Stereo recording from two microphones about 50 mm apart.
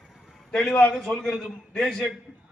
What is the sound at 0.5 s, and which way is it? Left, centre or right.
A man's voice, centre.